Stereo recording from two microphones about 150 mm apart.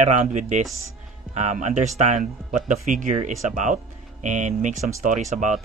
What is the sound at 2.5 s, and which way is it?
Speech, 60° right (ahead or behind).